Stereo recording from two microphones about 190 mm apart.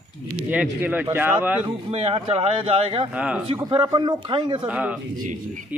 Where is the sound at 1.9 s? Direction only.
30° right (ahead or behind).